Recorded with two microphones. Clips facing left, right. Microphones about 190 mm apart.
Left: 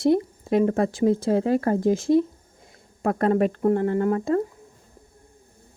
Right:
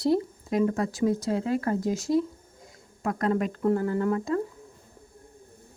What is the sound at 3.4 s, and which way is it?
Speech, 55° left (ahead or behind).